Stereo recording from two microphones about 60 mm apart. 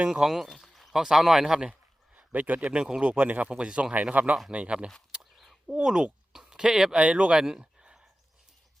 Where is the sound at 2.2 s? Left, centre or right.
Right.